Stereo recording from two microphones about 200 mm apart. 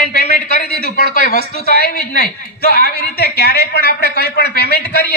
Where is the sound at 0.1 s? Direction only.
55° right (ahead or behind).